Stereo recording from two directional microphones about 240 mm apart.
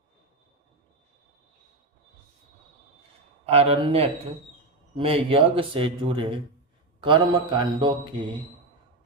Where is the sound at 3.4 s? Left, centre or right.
Right.